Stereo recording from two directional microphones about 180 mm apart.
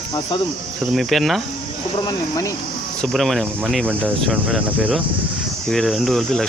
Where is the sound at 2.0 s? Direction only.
20° left (ahead or behind).